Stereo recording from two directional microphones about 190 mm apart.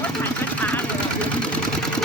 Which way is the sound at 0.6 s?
5° left (ahead or behind).